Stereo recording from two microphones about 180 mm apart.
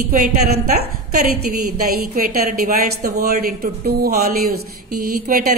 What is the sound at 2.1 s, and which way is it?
Speech, 55° right (ahead or behind).